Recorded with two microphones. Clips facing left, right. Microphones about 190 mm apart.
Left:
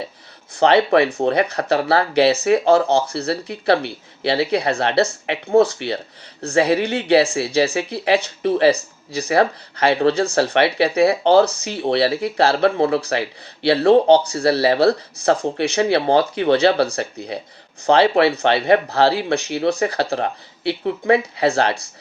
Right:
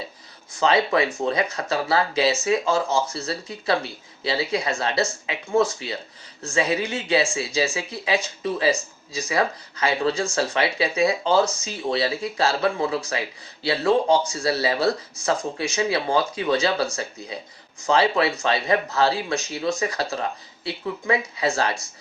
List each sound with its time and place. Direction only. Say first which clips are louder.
0.5 s speech: left 6 dB; 65° left (ahead or behind)